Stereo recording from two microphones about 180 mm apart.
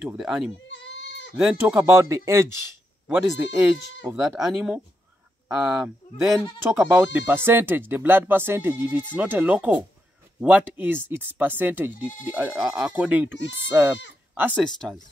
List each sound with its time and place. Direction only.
0.0 s speech: centre (ahead or behind)
0.7 s goat: 80° left
1.3 s speech: 5° right (ahead or behind)
14.6 s speech: 5° left (ahead or behind)